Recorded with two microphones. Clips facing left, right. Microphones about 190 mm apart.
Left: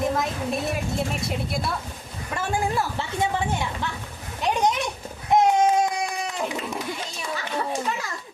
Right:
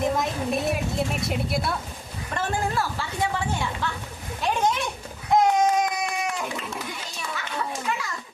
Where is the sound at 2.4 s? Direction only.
15° left (ahead or behind).